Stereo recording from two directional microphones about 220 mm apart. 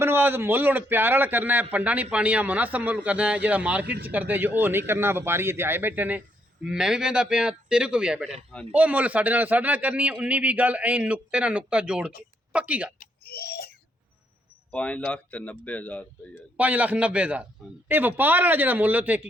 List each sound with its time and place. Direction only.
0.0 s a man's voice: 10° right (ahead or behind)
13.0 s a sound: 45° left (ahead or behind)
14.7 s speech: 5° left (ahead or behind)
16.6 s a man's voice: 5° right (ahead or behind)